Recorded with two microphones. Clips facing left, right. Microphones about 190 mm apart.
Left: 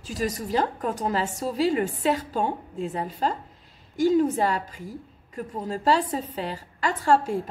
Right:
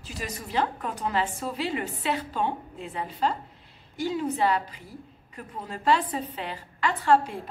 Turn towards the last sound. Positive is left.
turn(degrees=45)  # may be behind; listen again after turning